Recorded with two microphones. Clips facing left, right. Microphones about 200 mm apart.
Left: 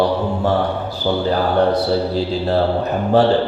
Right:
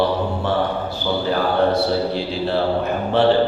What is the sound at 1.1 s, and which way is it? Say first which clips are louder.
Speech: left 4 dB; 45° left (ahead or behind).